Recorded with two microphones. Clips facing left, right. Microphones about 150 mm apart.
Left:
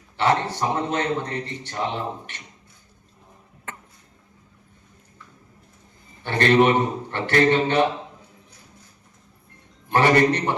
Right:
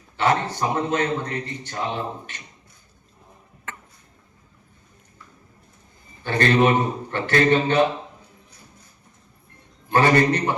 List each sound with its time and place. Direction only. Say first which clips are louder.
0.2 s a man's voice: even; 25° left (ahead or behind)
6.2 s a man's voice: left 1 dB; 25° left (ahead or behind)
9.9 s a man's voice: even; 25° left (ahead or behind)